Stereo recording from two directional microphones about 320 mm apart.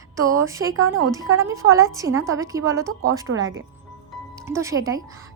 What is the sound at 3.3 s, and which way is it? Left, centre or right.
Speech, right.